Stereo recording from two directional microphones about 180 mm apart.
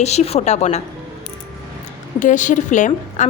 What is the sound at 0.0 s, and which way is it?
Speech, 35° left (ahead or behind).